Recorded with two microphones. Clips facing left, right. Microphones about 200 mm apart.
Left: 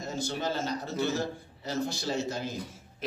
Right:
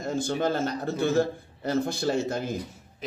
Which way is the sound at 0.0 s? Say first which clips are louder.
Right 6 dB; 55° right (ahead or behind).